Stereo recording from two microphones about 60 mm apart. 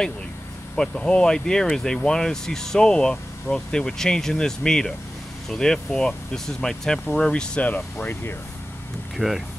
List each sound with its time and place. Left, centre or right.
0.7 s speech: centre
9.1 s speech: centre